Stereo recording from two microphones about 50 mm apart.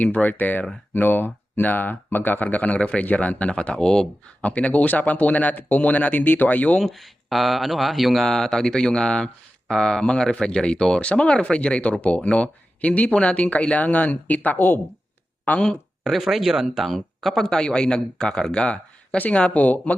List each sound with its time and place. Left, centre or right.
0.0 s speech: left
6.8 s speech: centre
8.3 s speech: centre; by 14.8 s left
15.4 s speech: left
16.0 s speech: centre
17.4 s speech: centre; by 20.0 s left